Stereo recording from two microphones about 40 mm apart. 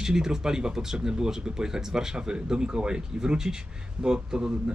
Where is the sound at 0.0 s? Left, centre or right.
Centre.